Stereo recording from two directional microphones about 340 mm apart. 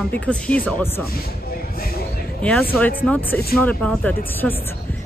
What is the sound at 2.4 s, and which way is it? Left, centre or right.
Speech, centre.